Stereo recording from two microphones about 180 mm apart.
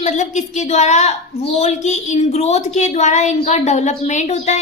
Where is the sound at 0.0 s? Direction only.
40° left (ahead or behind).